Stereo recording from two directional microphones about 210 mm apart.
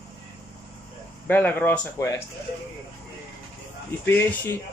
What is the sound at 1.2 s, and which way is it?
Speech, 10° left (ahead or behind).